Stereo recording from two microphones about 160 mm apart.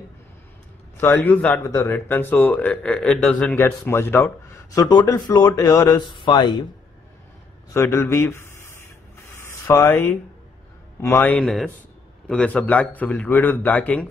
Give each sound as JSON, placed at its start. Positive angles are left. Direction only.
{"t": 0.9, "sound": "speech", "side_deg": 15}
{"t": 1.6, "sound": "speech", "side_deg": 20}
{"t": 7.7, "sound": "speech", "side_deg": 15}
{"t": 9.3, "sound": "a sound", "side_deg": 15}
{"t": 11.0, "sound": "speech", "side_deg": 15}